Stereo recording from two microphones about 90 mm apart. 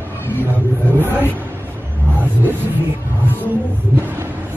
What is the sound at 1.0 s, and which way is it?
Speech, 20° right (ahead or behind).